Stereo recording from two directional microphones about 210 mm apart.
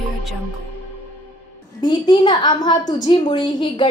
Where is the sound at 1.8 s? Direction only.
20° left (ahead or behind).